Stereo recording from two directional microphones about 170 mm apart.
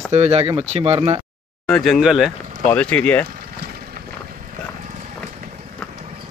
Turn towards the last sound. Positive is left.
turn(degrees=0)  # may be behind; listen again after turning